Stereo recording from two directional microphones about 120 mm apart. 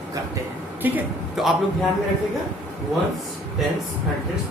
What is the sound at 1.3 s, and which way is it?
Speech, centre (ahead or behind).